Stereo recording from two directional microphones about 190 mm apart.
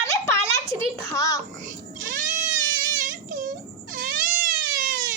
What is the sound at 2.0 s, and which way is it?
Cat, 45° right (ahead or behind).